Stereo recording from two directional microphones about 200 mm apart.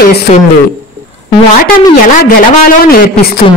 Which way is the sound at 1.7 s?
45° left (ahead or behind).